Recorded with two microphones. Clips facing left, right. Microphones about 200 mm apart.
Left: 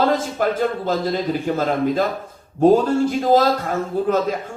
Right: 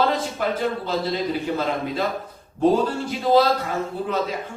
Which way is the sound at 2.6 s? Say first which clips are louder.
Left 5 dB; 45° left (ahead or behind).